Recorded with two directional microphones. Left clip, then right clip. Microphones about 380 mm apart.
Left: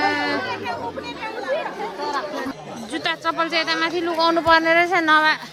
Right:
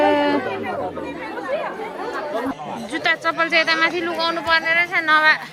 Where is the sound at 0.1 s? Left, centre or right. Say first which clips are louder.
Right 4 dB; centre.